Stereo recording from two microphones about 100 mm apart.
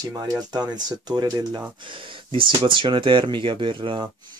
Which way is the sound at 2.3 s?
60° right (ahead or behind).